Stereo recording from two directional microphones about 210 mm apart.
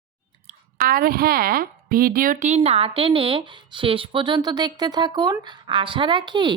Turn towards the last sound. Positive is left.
turn(degrees=-20)  # may be behind; listen again after turning